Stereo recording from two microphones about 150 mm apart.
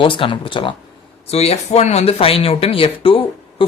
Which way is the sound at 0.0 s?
35° left (ahead or behind).